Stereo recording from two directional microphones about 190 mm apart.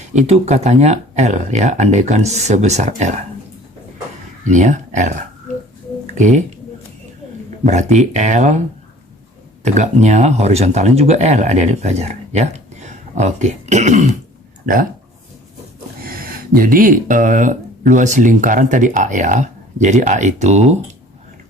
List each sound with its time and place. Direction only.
0.1 s speech: 35° right (ahead or behind)
4.5 s speech: 40° right (ahead or behind)
6.1 s speech: 40° right (ahead or behind)
7.6 s speech: 40° right (ahead or behind)
9.6 s speech: 35° right (ahead or behind)
16.0 s speech: 50° right (ahead or behind)